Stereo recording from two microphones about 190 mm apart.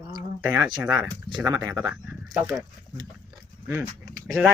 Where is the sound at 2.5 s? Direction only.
20° right (ahead or behind).